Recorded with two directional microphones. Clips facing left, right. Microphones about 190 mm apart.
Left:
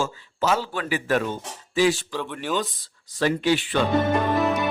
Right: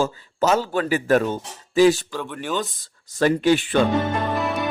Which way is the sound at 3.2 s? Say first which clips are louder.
Right 4 dB; 45° right (ahead or behind).